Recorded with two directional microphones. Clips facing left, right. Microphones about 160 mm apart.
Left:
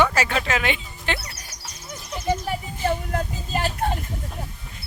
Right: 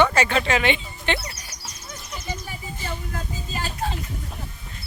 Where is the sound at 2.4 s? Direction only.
65° left (ahead or behind).